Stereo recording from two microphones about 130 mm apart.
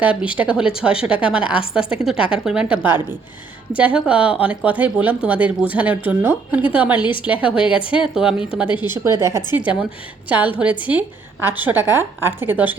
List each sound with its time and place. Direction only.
0.0 s a woman's voice: 10° right (ahead or behind)
7.0 s a woman's voice: 40° left (ahead or behind)
7.3 s speech: 10° right (ahead or behind)
7.8 s speech: 40° left (ahead or behind)
8.0 s a woman's voice: 5° right (ahead or behind)
8.6 s a woman's voice: 35° left (ahead or behind)
9.0 s a woman's voice: 25° right (ahead or behind)
10.2 s speech: 10° right (ahead or behind)